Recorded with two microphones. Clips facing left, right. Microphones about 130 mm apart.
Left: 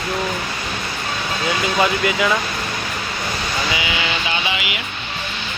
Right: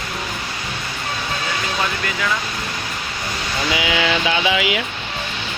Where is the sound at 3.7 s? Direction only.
90° right.